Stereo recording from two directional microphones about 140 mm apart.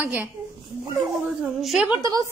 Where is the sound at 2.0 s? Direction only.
25° right (ahead or behind).